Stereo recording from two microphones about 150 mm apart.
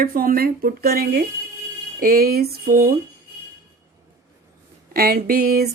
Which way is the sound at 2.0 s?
75° right (ahead or behind).